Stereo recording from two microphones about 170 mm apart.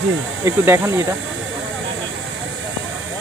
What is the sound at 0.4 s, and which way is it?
Speech, 15° right (ahead or behind).